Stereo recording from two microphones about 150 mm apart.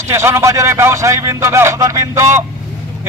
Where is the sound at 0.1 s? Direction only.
15° right (ahead or behind).